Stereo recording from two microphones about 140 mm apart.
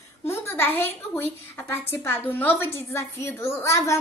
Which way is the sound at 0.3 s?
15° left (ahead or behind).